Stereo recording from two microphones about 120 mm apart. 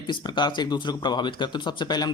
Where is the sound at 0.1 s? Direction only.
40° left (ahead or behind).